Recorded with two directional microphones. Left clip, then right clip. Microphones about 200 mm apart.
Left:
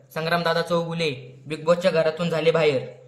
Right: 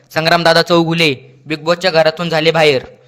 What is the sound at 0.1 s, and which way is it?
A man's voice, 45° right (ahead or behind).